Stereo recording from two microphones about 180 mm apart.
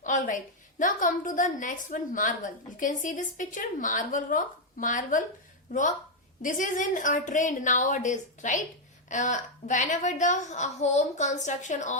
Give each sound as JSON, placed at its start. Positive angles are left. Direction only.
{"t": 0.0, "sound": "a woman's voice", "side_deg": 45}
{"t": 6.4, "sound": "a woman's voice", "side_deg": 45}